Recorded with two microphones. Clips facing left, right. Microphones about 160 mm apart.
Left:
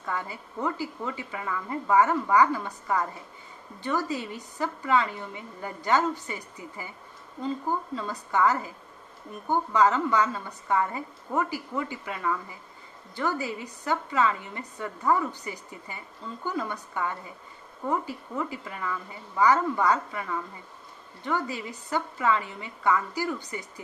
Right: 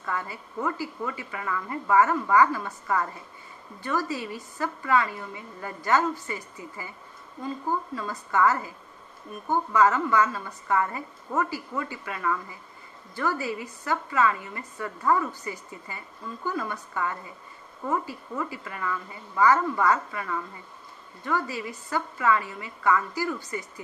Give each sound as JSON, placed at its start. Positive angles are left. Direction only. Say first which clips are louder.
{"t": 0.0, "sound": "a woman's voice", "louder": "right 1 dB", "side_deg": 20}
{"t": 17.8, "sound": "a woman's voice", "louder": "even", "side_deg": 15}